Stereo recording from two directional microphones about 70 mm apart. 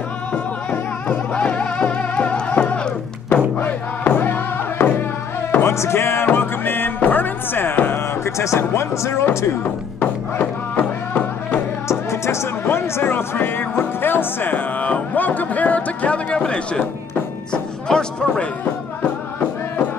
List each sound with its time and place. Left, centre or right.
0.3 s music: centre
8.4 s speech: left
9.9 s music: left
11.9 s music: left
12.6 s speech: left; by 16.8 s centre
17.5 s music: centre